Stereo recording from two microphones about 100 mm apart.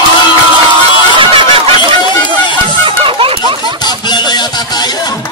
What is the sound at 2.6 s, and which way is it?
Music, 60° right (ahead or behind).